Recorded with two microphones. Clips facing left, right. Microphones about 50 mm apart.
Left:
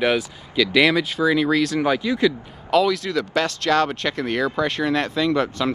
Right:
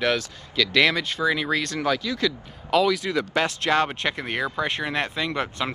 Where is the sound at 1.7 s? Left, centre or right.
Centre.